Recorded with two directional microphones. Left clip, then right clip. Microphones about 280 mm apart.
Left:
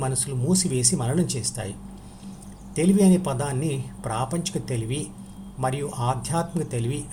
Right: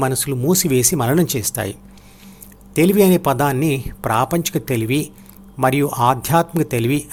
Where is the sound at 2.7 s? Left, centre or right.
Right.